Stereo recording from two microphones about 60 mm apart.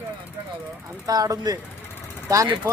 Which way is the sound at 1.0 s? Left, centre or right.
Right.